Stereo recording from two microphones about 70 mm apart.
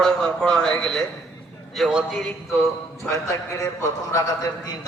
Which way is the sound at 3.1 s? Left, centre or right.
Left.